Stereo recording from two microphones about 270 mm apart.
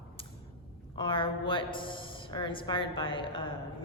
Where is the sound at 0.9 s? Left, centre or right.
Centre.